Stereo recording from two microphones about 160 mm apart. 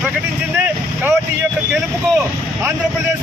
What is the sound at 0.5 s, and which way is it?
Speech, 10° right (ahead or behind).